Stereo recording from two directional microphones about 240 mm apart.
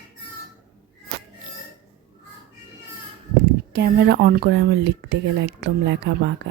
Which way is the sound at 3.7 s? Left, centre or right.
Right.